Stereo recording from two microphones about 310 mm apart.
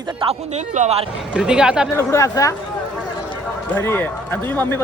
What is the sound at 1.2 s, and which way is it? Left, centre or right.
Speech, centre.